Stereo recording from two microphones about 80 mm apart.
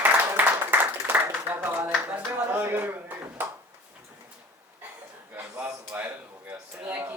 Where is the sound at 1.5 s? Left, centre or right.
Right.